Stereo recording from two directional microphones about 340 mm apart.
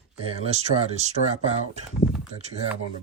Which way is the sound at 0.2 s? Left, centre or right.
Centre.